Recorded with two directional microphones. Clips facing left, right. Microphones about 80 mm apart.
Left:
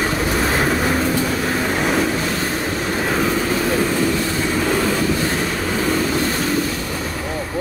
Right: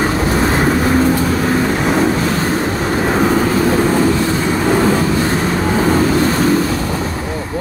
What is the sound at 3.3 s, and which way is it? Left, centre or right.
Vehicle, right.